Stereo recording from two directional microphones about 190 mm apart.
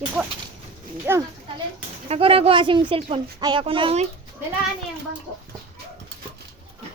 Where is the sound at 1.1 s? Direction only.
10° right (ahead or behind).